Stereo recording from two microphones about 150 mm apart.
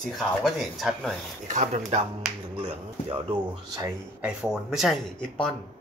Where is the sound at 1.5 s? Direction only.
50° right (ahead or behind).